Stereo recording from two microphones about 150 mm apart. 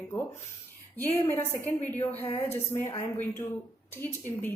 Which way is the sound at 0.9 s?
15° left (ahead or behind).